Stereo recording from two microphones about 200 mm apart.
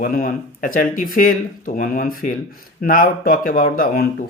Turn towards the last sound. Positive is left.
turn(degrees=45)  # may be behind; listen again after turning